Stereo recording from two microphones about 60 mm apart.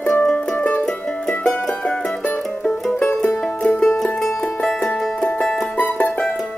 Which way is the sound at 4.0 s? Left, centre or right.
Centre.